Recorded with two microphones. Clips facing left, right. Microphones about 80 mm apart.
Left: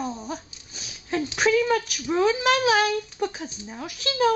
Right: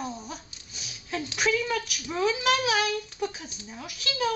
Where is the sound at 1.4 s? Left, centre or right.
Left.